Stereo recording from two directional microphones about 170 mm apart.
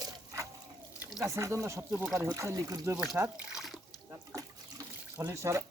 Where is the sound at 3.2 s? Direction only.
5° right (ahead or behind).